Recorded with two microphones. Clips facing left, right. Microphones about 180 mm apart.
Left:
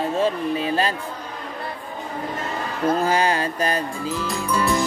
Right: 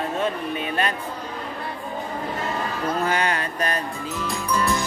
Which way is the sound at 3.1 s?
30° left (ahead or behind).